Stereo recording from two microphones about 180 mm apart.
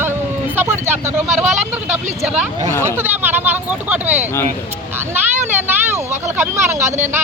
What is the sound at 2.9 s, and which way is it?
Speech, 10° right (ahead or behind).